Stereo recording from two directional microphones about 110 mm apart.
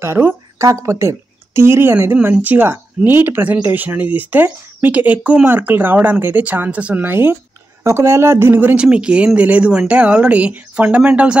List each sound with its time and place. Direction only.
0.0 s speech: 20° right (ahead or behind)